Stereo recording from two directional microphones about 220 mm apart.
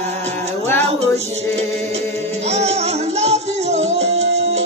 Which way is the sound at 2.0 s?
30° right (ahead or behind).